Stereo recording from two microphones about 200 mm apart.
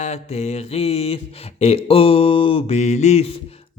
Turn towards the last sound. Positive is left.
turn(degrees=35)  # may be behind; listen again after turning